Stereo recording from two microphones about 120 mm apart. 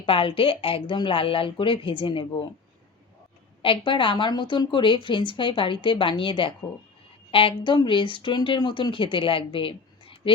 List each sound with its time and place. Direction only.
0.0 s a woman's voice: 45° left (ahead or behind)
3.6 s a woman's voice: 45° left (ahead or behind)